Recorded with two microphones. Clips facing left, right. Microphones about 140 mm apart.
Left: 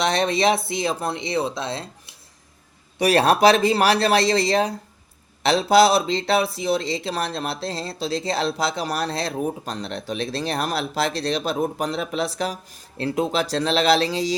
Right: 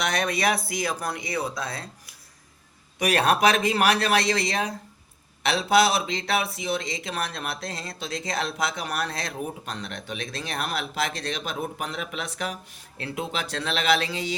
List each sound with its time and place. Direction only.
0.0 s speech: 30° left (ahead or behind)